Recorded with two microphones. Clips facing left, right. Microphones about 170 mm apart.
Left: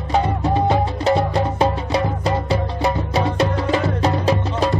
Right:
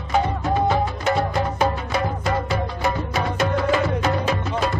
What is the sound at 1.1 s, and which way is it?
Music, 30° left (ahead or behind).